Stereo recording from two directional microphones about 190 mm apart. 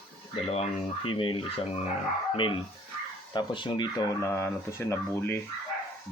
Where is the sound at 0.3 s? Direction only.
30° left (ahead or behind).